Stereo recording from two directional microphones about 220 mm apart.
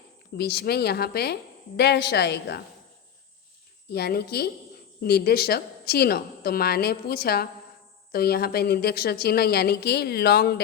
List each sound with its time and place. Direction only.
0.3 s a woman's voice: 50° left (ahead or behind)
3.9 s a woman's voice: 45° left (ahead or behind)